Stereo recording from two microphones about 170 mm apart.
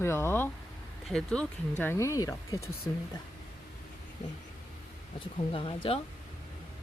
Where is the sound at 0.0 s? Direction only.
15° left (ahead or behind).